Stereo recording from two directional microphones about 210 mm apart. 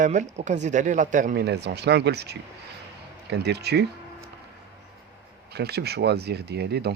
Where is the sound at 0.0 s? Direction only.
35° right (ahead or behind); by 3.8 s 50° right (ahead or behind).